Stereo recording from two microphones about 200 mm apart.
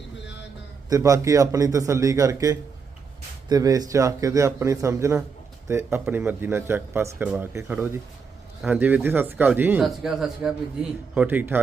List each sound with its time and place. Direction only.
0.9 s speech: 15° right (ahead or behind)